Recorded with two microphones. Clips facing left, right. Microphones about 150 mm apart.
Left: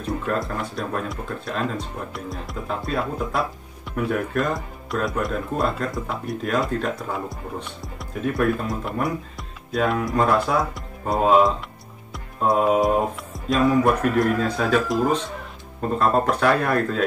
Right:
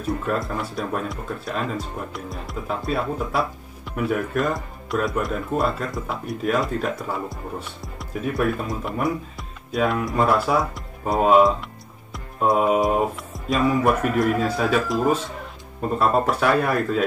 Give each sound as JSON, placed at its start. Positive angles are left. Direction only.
{"t": 0.0, "sound": "speech", "side_deg": 0}